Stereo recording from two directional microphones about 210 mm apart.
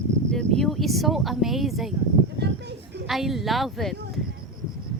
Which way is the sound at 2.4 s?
55° right (ahead or behind).